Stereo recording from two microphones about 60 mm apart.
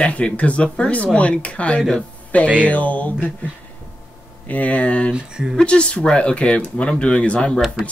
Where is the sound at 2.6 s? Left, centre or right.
Left.